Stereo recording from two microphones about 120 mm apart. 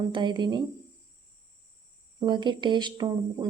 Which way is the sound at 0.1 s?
40° right (ahead or behind).